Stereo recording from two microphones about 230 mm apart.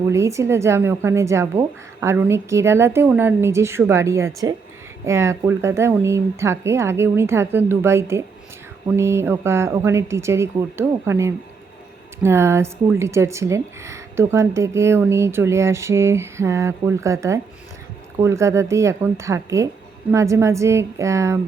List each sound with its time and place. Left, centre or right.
0.1 s speech: centre